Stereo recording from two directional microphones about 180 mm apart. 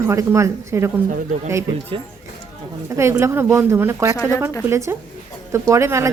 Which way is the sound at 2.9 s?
15° right (ahead or behind).